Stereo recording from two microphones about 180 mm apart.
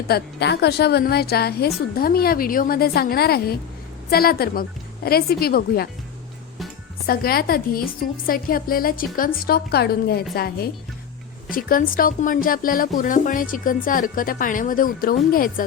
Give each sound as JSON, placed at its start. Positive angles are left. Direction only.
{"t": 0.1, "sound": "a woman's voice", "side_deg": 65}
{"t": 7.1, "sound": "a woman's voice", "side_deg": 55}